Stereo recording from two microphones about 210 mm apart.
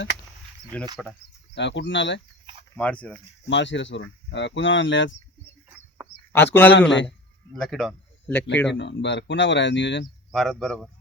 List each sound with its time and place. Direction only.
1.0 s a man's voice: centre (ahead or behind)
1.5 s speech: 55° left (ahead or behind)
2.7 s a man's voice: 5° left (ahead or behind)
3.4 s speech: 55° left (ahead or behind)
5.6 s bird: 10° right (ahead or behind)
6.3 s a man's voice: 10° left (ahead or behind)
6.7 s speech: 60° left (ahead or behind)
7.5 s a man's voice: centre (ahead or behind)
8.7 s speech: 55° left (ahead or behind)
10.3 s a man's voice: centre (ahead or behind)